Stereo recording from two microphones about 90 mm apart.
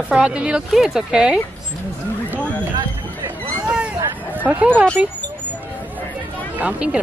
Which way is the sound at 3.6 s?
10° right (ahead or behind).